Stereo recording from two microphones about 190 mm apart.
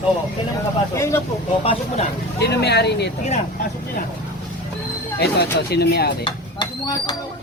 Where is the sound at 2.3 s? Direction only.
60° left (ahead or behind).